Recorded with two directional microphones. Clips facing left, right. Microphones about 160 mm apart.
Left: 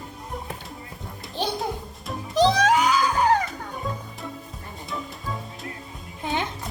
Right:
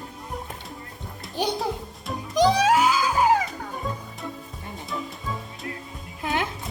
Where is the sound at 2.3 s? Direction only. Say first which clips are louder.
Even; 10° right (ahead or behind).